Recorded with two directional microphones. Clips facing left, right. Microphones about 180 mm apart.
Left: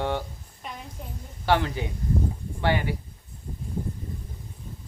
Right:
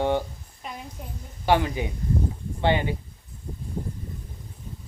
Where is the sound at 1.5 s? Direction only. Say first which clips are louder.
Right 2 dB; 15° right (ahead or behind).